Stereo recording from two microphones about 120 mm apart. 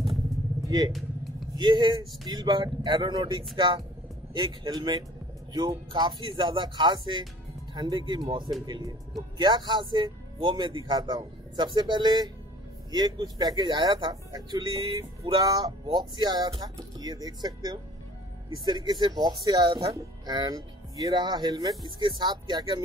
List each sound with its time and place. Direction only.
0.7 s speech: 35° right (ahead or behind)